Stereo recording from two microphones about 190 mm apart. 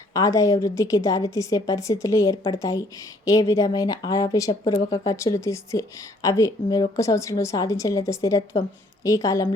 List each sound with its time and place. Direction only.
0.1 s a woman's voice: 20° left (ahead or behind)